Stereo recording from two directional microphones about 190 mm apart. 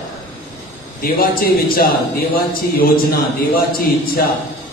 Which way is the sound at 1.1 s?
55° left (ahead or behind).